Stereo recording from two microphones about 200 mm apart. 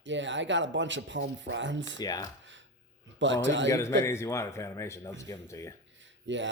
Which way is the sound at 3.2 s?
65° right (ahead or behind).